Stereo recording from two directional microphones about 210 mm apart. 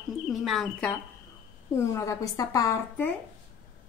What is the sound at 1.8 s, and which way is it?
Speech, 15° left (ahead or behind).